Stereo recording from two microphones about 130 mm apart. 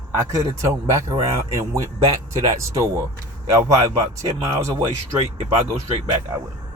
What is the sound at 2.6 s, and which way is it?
A man's voice, 20° right (ahead or behind).